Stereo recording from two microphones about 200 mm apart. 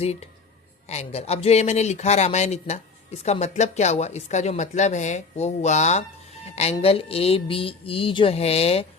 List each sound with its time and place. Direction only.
0.0 s speech: 30° left (ahead or behind)